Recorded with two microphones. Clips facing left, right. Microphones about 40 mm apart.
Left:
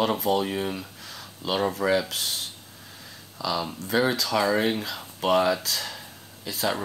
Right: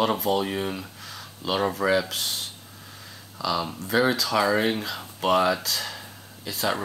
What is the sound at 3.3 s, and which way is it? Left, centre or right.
Speech, centre.